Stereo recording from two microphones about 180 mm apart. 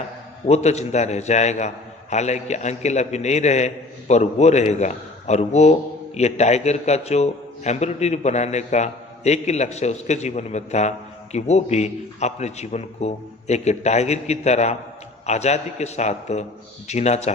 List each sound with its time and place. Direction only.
0.4 s a man's voice: 40° left (ahead or behind)